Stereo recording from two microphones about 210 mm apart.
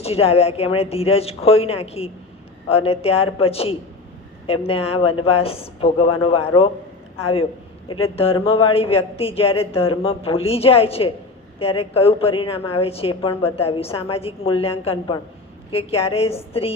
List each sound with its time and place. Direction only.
0.0 s a woman's voice: 30° left (ahead or behind)
7.9 s a woman's voice: 25° left (ahead or behind)